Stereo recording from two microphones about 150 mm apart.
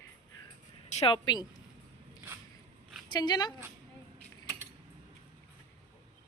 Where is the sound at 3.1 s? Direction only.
30° left (ahead or behind).